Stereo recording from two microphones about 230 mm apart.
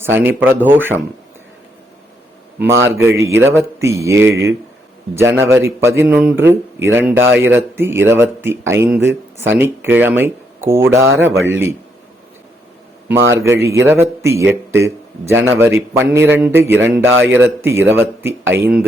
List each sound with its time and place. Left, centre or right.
0.0 s speech: centre
2.6 s speech: centre
13.3 s speech: centre